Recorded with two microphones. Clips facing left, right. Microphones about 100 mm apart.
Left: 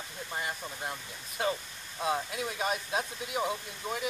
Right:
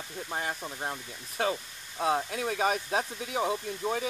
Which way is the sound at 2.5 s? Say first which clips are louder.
Right 5 dB; 45° right (ahead or behind).